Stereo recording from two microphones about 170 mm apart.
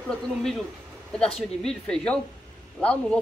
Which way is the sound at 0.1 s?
Centre (ahead or behind).